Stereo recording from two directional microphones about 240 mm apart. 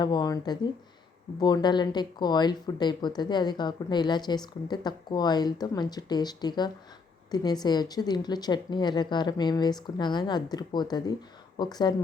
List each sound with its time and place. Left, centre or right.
0.0 s speech: centre